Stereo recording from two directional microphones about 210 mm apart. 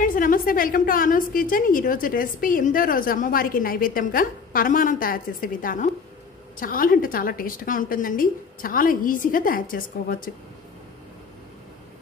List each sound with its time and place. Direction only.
0.0 s a woman's voice: 40° left (ahead or behind)